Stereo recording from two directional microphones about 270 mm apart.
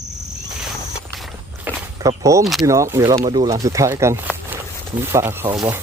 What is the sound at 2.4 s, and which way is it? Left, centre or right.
Speech, centre.